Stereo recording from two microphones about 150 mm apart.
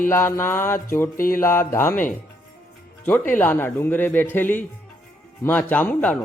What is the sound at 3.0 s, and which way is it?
A man's voice, 10° left (ahead or behind).